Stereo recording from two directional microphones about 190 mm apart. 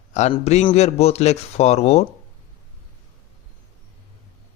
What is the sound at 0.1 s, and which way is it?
Speech, 35° left (ahead or behind).